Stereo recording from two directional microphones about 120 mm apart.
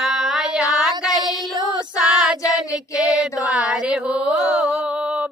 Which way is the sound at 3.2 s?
10° right (ahead or behind).